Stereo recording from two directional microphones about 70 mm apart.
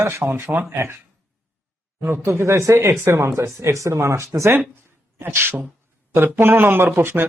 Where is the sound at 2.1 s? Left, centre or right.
Right.